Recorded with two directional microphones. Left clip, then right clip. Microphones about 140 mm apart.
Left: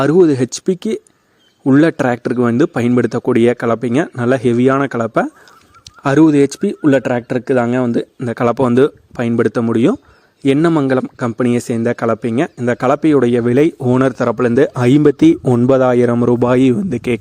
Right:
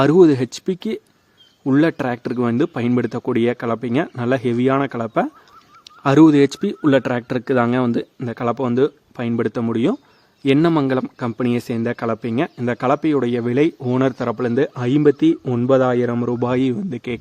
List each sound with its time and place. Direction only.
0.0 s speech: 25° left (ahead or behind)
8.3 s a man's voice: 45° left (ahead or behind)
8.5 s a man's voice: 65° left (ahead or behind)
9.1 s speech: 40° left (ahead or behind)
15.6 s a man's voice: 60° left (ahead or behind)
16.2 s a man's voice: 50° left (ahead or behind)